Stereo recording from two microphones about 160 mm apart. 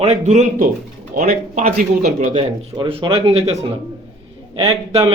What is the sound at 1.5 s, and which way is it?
Speech, 50° right (ahead or behind).